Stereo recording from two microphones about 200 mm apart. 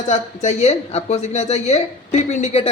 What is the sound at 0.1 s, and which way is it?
A woman's voice, 35° left (ahead or behind).